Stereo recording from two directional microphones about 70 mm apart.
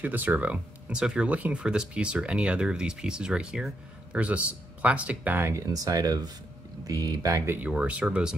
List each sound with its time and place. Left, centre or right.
0.0 s speech: right
5.4 s speech: right
7.4 s speech: right
7.7 s speech: centre